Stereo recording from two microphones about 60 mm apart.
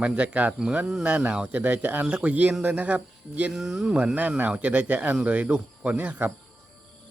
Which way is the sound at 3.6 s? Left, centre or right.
Centre.